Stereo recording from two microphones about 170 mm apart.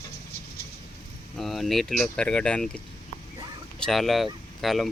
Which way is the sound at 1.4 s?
Centre (ahead or behind).